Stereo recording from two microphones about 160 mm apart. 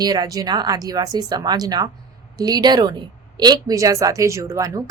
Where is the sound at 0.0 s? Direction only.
25° right (ahead or behind).